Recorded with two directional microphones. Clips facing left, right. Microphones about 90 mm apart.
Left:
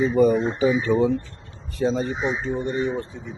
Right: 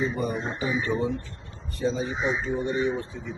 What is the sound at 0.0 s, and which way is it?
Speech, centre (ahead or behind).